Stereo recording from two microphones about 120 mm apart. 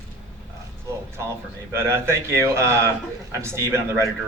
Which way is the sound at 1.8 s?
20° right (ahead or behind).